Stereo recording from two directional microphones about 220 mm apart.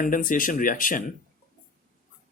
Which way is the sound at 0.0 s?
40° left (ahead or behind).